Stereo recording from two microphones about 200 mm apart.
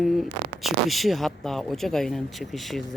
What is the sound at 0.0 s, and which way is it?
Speech, centre (ahead or behind).